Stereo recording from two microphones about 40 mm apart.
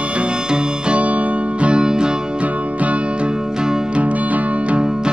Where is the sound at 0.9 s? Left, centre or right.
Right.